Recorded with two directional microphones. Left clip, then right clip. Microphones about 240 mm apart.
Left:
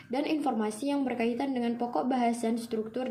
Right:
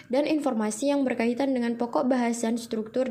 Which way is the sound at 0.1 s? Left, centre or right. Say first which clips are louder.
Right 5 dB; right.